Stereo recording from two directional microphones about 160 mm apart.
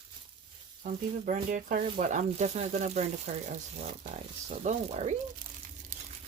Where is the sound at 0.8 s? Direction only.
55° right (ahead or behind).